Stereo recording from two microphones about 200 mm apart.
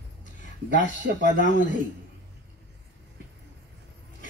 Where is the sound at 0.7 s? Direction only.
40° left (ahead or behind).